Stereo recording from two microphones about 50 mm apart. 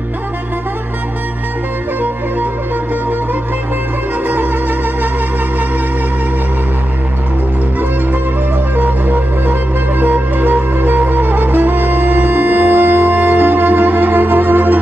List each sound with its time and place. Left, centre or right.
4.3 s music: right
8.7 s music: right